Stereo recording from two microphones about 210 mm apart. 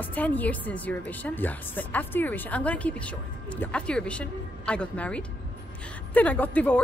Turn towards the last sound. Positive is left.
turn(degrees=10)  # may be behind; listen again after turning